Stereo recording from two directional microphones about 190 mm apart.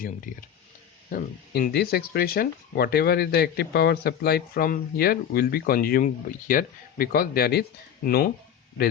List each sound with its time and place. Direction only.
1.1 s speech: 50° left (ahead or behind)